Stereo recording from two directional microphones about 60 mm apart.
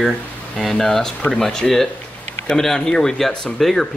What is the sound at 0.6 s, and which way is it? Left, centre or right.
Speech, centre.